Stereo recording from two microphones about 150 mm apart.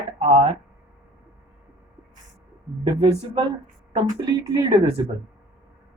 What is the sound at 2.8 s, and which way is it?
Speech, 35° right (ahead or behind).